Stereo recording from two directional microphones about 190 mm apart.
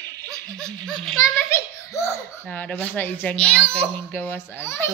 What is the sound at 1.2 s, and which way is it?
A child's voice, 15° left (ahead or behind).